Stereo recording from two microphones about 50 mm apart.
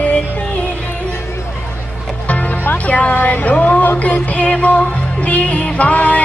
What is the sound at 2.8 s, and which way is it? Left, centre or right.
Music, left.